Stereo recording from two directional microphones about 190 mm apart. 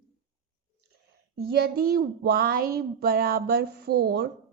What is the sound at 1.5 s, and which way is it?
A woman's voice, 55° right (ahead or behind).